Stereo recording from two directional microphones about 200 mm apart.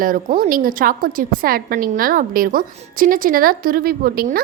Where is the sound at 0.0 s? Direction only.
45° right (ahead or behind).